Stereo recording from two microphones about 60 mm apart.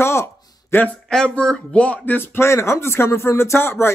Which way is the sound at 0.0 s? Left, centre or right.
Left.